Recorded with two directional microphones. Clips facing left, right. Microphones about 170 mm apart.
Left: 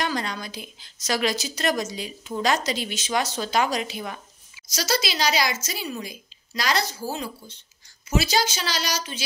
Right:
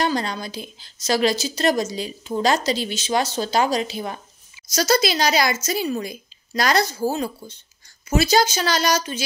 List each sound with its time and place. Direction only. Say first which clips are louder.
0.0 s a woman's voice: right 5 dB; 35° right (ahead or behind)
4.6 s speech: right 7 dB; 45° right (ahead or behind)